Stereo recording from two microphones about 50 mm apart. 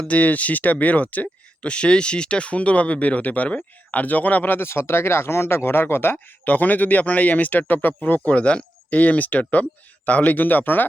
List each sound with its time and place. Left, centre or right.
0.1 s speech: left
4.7 s speech: left
6.4 s speech: left